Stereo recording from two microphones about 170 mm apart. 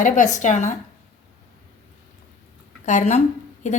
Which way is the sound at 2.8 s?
45° left (ahead or behind).